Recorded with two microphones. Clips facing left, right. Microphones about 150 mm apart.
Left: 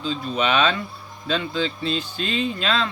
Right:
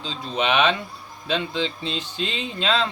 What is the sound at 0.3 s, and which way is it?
Speech, 20° right (ahead or behind).